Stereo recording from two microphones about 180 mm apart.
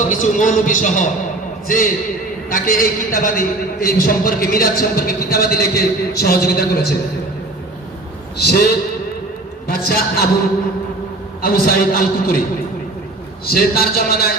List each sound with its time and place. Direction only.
0.1 s a man's voice: 45° left (ahead or behind)
8.4 s a man's voice: 65° left (ahead or behind)
9.6 s a man's voice: 55° left (ahead or behind)
11.4 s a man's voice: 55° left (ahead or behind)
13.4 s a man's voice: 55° left (ahead or behind)